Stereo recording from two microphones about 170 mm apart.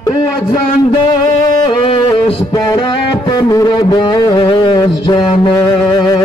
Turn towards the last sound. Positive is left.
turn(degrees=25)  # may be behind; listen again after turning